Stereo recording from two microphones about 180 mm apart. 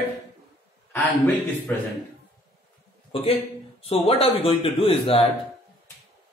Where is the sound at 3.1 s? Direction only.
30° left (ahead or behind).